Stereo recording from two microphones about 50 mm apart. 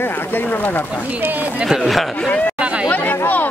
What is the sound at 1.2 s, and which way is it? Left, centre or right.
Speech, right.